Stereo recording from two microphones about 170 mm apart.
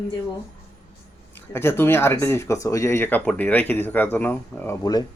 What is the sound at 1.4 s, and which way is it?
Speech, 15° left (ahead or behind).